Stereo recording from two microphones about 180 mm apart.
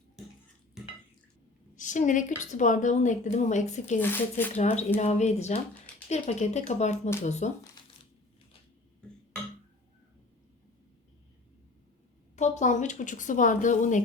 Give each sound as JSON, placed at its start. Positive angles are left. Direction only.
{"t": 1.7, "sound": "a sound", "side_deg": 45}
{"t": 2.4, "sound": "a woman's voice", "side_deg": 45}
{"t": 4.0, "sound": "speech", "side_deg": 10}
{"t": 4.5, "sound": "speech", "side_deg": 40}
{"t": 12.4, "sound": "a woman's voice", "side_deg": 40}